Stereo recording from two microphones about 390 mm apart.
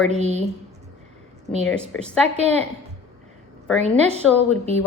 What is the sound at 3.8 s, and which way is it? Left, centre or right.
Speech, centre.